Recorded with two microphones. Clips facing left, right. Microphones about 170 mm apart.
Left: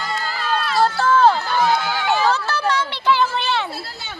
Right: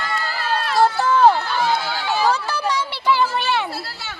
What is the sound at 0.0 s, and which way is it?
Run, 60° right (ahead or behind).